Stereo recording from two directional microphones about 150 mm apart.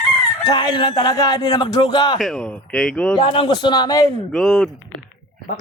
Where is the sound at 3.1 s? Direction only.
30° left (ahead or behind).